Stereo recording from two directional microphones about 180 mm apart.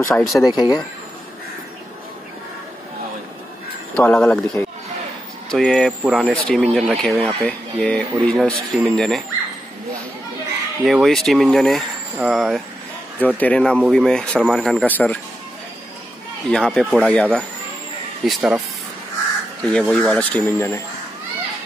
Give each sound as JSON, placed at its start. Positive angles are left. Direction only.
{"t": 0.0, "sound": "speech", "side_deg": 15}
{"t": 3.9, "sound": "speech", "side_deg": 5}
{"t": 10.9, "sound": "speech", "side_deg": 0}
{"t": 16.4, "sound": "speech", "side_deg": 5}
{"t": 19.7, "sound": "speech", "side_deg": 5}